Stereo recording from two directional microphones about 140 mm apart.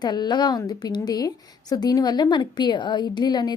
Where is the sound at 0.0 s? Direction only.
30° left (ahead or behind).